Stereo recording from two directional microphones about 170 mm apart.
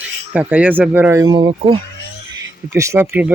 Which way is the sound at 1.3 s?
30° right (ahead or behind).